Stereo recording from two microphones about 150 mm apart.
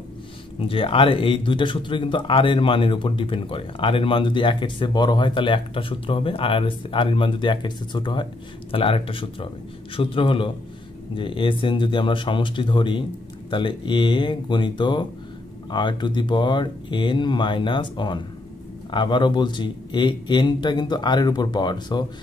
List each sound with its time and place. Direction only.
0.6 s a man's voice: 35° left (ahead or behind)